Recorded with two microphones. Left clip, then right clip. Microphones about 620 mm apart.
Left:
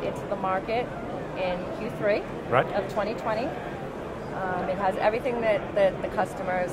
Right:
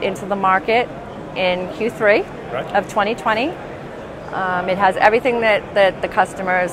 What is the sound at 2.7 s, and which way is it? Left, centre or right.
Speech, right.